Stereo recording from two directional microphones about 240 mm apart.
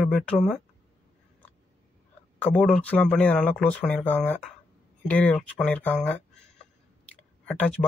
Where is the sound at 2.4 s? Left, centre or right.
Centre.